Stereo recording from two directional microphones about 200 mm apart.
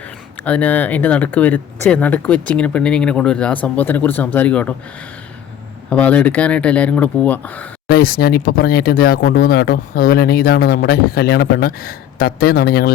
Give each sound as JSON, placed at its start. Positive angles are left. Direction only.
{"t": 0.4, "sound": "speech", "side_deg": 5}
{"t": 5.9, "sound": "speech", "side_deg": 5}
{"t": 7.9, "sound": "speech", "side_deg": 50}